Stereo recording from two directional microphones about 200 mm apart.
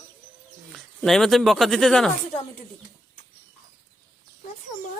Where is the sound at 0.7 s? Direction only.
Centre (ahead or behind).